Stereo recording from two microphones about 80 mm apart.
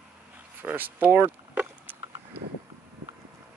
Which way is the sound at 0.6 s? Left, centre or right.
Right.